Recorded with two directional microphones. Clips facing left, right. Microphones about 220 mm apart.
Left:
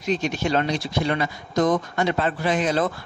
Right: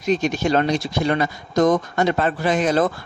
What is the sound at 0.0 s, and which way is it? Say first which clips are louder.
Speech: right 4 dB; 45° right (ahead or behind).